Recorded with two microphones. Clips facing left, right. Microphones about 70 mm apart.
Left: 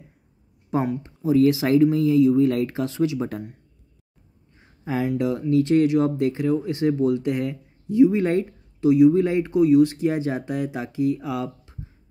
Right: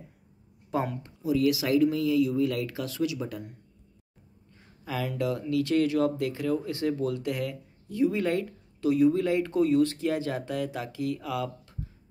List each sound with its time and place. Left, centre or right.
0.7 s speech: left
1.2 s speech: left
4.6 s speech: left
9.5 s speech: centre